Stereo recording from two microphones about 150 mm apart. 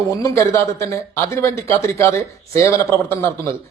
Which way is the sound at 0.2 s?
20° left (ahead or behind).